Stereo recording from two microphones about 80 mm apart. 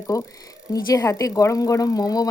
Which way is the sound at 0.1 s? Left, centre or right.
Left.